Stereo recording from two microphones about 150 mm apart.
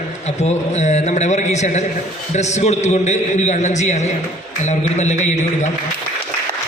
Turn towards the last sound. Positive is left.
turn(degrees=50)  # may be behind; listen again after turning